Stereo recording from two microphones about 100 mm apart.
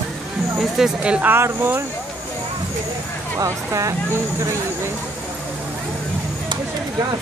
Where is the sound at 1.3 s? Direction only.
20° right (ahead or behind).